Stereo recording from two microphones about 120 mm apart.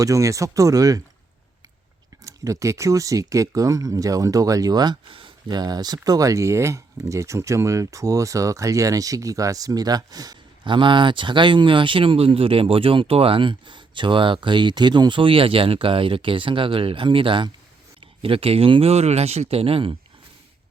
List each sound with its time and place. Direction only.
0.0 s speech: 25° right (ahead or behind)
2.2 s speech: 25° right (ahead or behind); by 20.0 s 50° right (ahead or behind)